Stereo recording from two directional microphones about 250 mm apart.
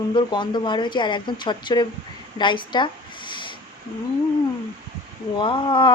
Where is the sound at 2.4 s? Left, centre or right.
Centre.